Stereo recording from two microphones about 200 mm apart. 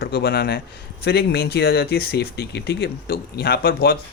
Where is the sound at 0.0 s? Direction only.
50° left (ahead or behind).